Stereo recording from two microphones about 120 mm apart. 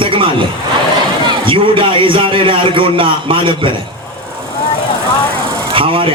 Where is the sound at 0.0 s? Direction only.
45° right (ahead or behind).